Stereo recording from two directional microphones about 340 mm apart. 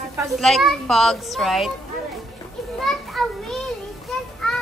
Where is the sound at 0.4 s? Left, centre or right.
Centre.